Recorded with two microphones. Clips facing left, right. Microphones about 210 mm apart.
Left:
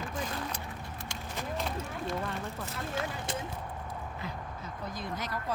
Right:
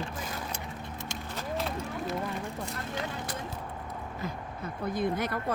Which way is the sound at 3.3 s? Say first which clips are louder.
Left 1 dB; 25° left (ahead or behind).